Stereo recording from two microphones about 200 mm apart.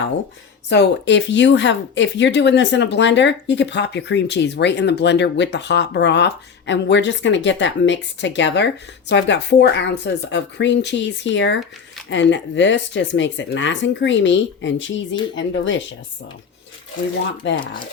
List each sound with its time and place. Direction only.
0.7 s speech: 60° left (ahead or behind)
17.4 s speech: 65° left (ahead or behind)